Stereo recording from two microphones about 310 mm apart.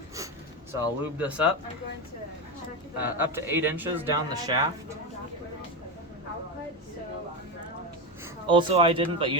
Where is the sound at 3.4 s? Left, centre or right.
Centre.